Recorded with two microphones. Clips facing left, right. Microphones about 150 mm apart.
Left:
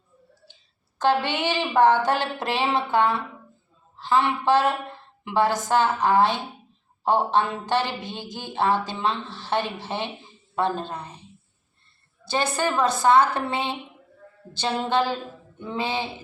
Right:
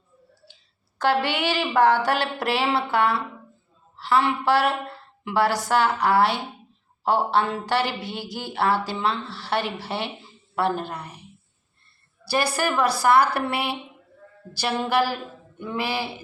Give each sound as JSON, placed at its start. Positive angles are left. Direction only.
{"t": 0.9, "sound": "a woman's voice", "side_deg": 20}
{"t": 12.5, "sound": "a woman's voice", "side_deg": 20}